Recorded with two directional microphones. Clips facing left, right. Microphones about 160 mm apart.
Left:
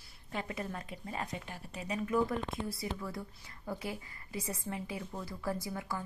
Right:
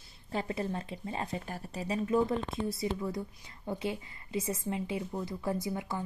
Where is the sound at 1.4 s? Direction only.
40° right (ahead or behind).